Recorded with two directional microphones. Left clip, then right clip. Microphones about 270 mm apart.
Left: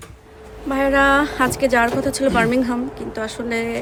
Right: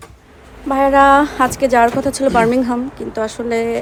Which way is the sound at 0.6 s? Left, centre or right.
Centre.